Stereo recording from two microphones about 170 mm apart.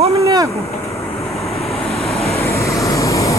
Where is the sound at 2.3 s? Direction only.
15° left (ahead or behind).